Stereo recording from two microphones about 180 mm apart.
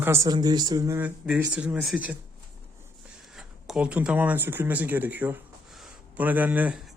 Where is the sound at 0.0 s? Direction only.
15° right (ahead or behind).